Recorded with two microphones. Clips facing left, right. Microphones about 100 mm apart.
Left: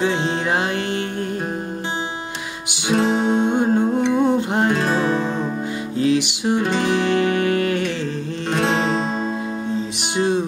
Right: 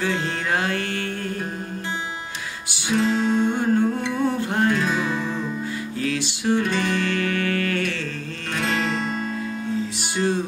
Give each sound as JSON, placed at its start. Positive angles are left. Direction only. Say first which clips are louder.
{"t": 0.0, "sound": "music", "louder": "left 5 dB", "side_deg": 20}
{"t": 3.0, "sound": "music", "louder": "left 2 dB", "side_deg": 60}
{"t": 3.3, "sound": "music", "louder": "left 3 dB", "side_deg": 20}
{"t": 5.0, "sound": "music", "louder": "left 5 dB", "side_deg": 55}
{"t": 5.9, "sound": "music", "louder": "left 9 dB", "side_deg": 20}